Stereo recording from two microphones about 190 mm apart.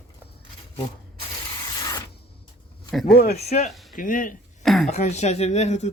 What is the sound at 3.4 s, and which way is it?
Speech, 35° left (ahead or behind).